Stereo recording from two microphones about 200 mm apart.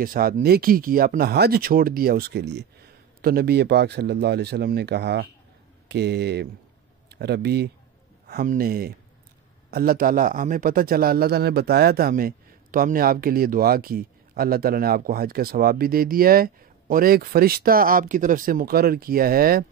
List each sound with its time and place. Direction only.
0.0 s a man's voice: 45° right (ahead or behind)